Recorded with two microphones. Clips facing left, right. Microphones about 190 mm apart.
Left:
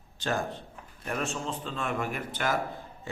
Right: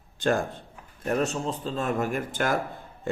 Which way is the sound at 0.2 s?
50° right (ahead or behind).